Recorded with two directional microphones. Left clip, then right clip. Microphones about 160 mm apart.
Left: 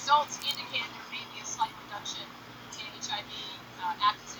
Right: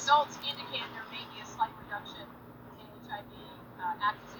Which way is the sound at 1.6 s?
5° right (ahead or behind).